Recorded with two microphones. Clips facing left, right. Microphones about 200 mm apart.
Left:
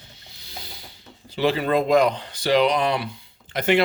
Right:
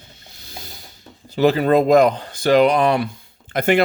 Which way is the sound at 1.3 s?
45° right (ahead or behind).